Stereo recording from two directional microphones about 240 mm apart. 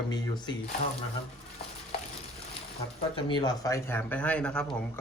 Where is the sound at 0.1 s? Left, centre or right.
Centre.